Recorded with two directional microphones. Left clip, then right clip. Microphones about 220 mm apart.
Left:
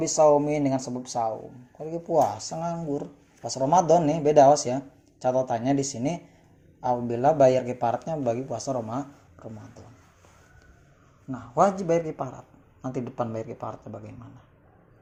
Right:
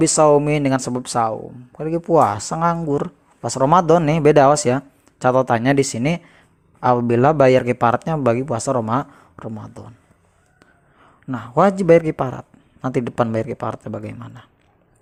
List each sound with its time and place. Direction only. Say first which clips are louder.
0.2 s a man's voice: right 4 dB; 45° right (ahead or behind)
11.3 s a man's voice: right 6 dB; 45° right (ahead or behind)